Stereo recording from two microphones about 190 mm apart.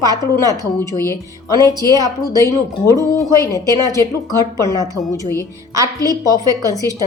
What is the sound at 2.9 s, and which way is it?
A woman's voice, 15° left (ahead or behind).